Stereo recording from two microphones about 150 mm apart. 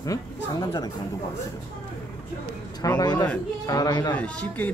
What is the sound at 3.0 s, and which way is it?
Speech, 25° left (ahead or behind).